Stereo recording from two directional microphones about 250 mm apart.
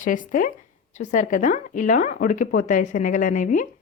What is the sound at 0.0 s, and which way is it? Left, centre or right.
A woman's voice, left.